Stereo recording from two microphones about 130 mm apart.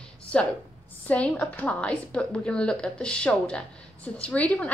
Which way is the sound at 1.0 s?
10° left (ahead or behind).